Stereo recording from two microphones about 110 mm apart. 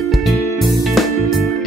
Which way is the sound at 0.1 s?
Centre (ahead or behind).